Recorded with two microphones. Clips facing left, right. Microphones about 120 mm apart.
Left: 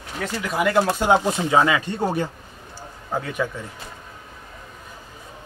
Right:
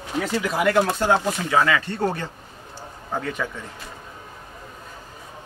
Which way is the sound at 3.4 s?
10° left (ahead or behind).